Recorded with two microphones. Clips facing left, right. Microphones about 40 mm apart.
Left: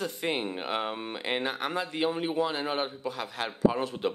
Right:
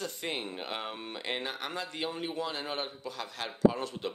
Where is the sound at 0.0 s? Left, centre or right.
Centre.